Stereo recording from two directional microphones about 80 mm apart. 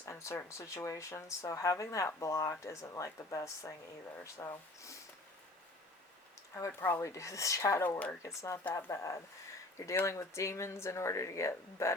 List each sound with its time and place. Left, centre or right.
0.0 s speech: left
4.4 s speech: left
6.7 s speech: left
7.0 s speech: left
7.9 s speech: centre
8.2 s speech: left